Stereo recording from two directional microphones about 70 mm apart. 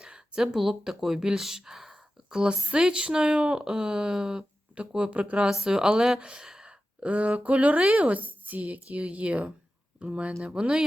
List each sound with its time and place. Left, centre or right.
0.0 s a woman's voice: centre